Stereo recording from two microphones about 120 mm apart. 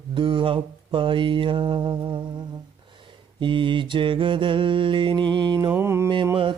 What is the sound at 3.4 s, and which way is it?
Mantra, 45° right (ahead or behind).